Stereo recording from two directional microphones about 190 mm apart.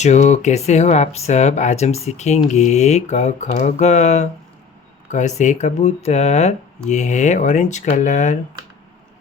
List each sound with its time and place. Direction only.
0.0 s speech: 40° left (ahead or behind)